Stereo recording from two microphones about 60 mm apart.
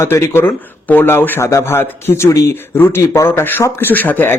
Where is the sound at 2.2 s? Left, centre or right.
Left.